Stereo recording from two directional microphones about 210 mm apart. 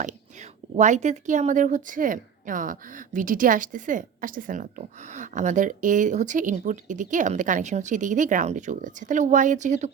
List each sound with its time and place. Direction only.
0.8 s a woman's voice: 35° right (ahead or behind)